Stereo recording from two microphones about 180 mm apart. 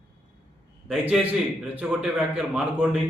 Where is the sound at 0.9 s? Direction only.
Centre (ahead or behind).